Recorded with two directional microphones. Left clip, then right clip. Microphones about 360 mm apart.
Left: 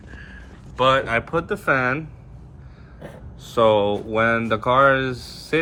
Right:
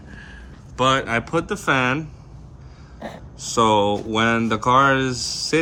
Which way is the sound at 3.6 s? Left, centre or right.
Right.